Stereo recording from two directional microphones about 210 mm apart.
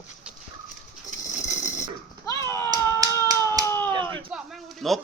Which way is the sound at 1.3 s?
35° left (ahead or behind).